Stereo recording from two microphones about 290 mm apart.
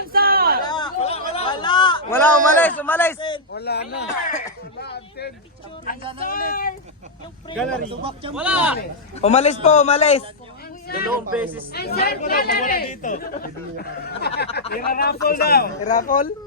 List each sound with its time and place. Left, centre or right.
0.1 s a sound: right
0.6 s chatter: centre
3.5 s a woman's voice: left
7.5 s speech: centre
7.9 s a man's voice: centre
8.4 s speech: centre
9.2 s a man's voice: left
11.3 s speech: centre
11.7 s a woman's voice: left